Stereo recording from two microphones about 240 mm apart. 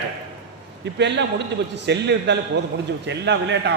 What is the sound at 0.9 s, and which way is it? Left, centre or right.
A man's voice, right.